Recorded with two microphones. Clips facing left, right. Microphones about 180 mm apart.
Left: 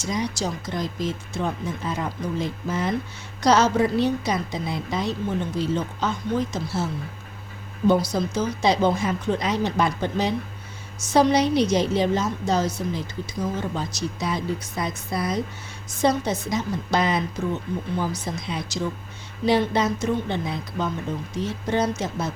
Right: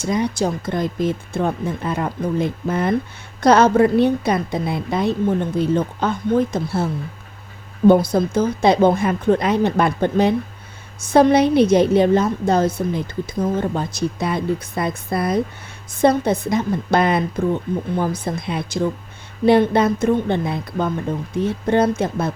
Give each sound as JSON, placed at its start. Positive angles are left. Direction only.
{"t": 0.0, "sound": "a woman's voice", "side_deg": -55}